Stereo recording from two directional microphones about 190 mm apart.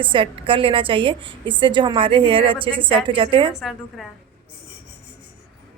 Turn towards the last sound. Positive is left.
turn(degrees=0)  # may be behind; listen again after turning